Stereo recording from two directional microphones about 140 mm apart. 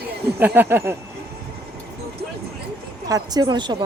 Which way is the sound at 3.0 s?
25° right (ahead or behind).